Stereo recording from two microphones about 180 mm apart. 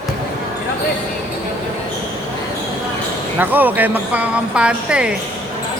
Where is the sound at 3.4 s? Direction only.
10° right (ahead or behind).